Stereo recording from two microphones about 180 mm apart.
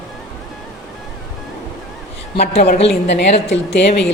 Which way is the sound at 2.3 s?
35° left (ahead or behind).